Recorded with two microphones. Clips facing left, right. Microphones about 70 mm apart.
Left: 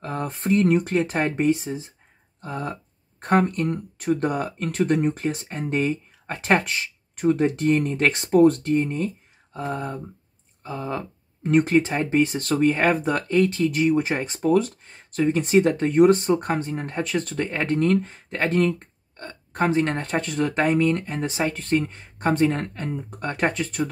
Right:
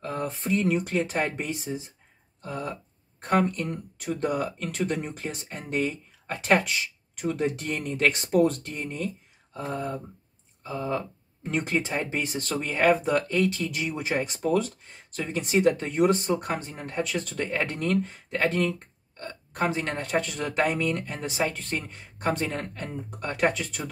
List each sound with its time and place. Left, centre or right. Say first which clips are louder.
0.0 s speech: left 3 dB; left
11.4 s speech: left 9 dB; left